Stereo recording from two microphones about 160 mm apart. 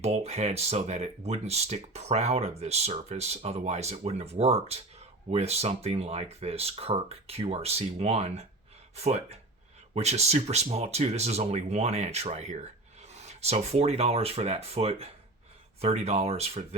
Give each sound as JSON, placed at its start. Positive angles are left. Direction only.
{"t": 0.0, "sound": "speech", "side_deg": -40}